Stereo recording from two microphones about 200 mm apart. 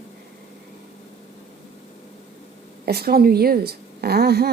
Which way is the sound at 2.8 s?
50° right (ahead or behind).